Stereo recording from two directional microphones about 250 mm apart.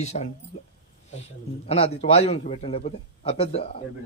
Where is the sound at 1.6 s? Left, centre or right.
Left.